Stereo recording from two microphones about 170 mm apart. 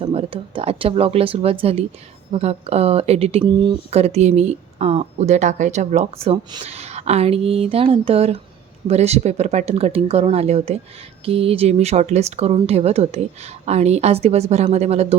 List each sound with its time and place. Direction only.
0.0 s speech: 35° right (ahead or behind)